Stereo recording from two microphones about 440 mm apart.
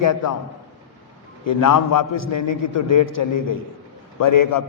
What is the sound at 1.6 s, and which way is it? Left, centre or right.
Speech, left.